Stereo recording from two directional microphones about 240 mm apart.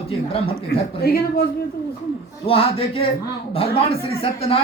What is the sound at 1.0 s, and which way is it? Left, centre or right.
Speech, left.